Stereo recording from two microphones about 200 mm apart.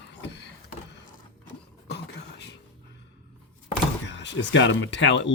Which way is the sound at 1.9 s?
55° left (ahead or behind).